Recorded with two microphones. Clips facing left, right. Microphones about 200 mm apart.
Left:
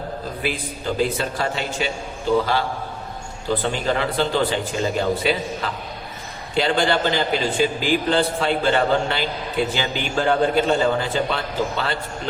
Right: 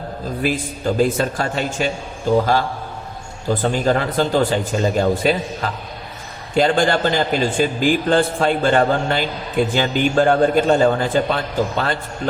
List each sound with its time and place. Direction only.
0.4 s a man's voice: 45° right (ahead or behind)
3.5 s a man's voice: 45° right (ahead or behind)
6.5 s a man's voice: 45° right (ahead or behind)